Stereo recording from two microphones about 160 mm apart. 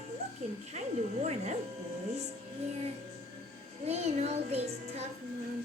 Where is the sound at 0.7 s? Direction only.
40° right (ahead or behind).